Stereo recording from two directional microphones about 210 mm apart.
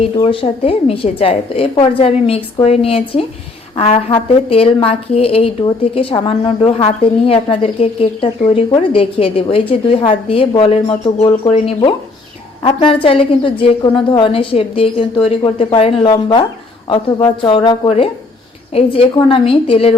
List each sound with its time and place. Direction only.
0.2 s speech: 25° left (ahead or behind)